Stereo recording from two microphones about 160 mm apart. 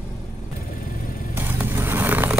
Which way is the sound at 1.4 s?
10° right (ahead or behind).